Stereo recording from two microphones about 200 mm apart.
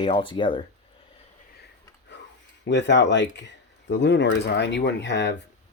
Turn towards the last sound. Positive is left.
turn(degrees=60)  # may be behind; listen again after turning